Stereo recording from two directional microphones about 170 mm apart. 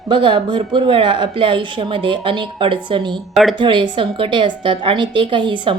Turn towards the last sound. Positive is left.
turn(degrees=-30)  # may be behind; listen again after turning